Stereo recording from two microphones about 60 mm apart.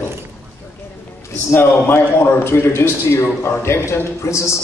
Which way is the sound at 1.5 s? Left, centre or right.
Left.